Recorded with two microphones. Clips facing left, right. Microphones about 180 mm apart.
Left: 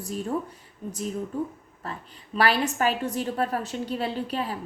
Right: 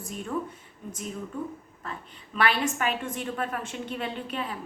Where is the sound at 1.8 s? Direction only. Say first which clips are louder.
Left 2 dB; 35° left (ahead or behind).